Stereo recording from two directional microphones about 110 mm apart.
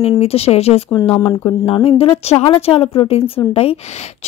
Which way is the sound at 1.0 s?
35° left (ahead or behind).